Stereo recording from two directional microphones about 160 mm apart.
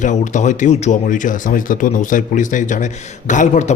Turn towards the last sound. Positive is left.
turn(degrees=50)  # may be behind; listen again after turning